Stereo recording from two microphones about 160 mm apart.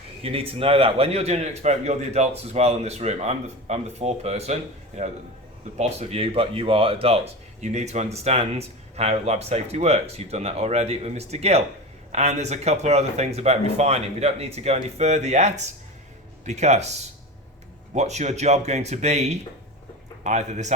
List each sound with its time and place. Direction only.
0.2 s a man's voice: 35° right (ahead or behind)
5.7 s a man's voice: 45° right (ahead or behind)